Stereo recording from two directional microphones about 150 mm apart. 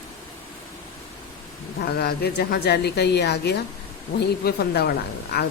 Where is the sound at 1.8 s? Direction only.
90° left.